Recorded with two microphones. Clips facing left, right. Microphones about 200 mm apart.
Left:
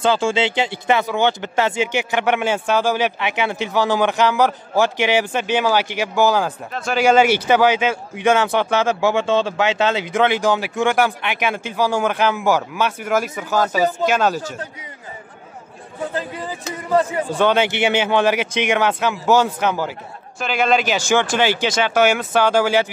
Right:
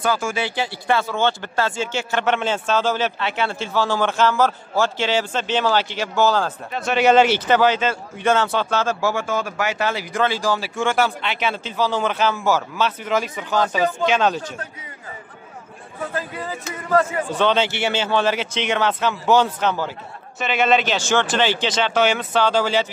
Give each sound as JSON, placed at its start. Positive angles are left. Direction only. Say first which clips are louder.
{"t": 0.0, "sound": "speech", "louder": "left 5 dB", "side_deg": 25}
{"t": 6.7, "sound": "a man's voice", "louder": "right 1 dB", "side_deg": 0}
{"t": 7.1, "sound": "speech", "louder": "left 1 dB", "side_deg": 10}
{"t": 17.3, "sound": "speech", "louder": "left 4 dB", "side_deg": 10}
{"t": 20.3, "sound": "a man's voice", "louder": "even", "side_deg": 0}
{"t": 20.8, "sound": "speech", "louder": "left 2 dB", "side_deg": 10}